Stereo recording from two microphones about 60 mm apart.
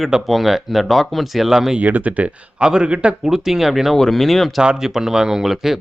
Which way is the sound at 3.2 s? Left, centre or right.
Centre.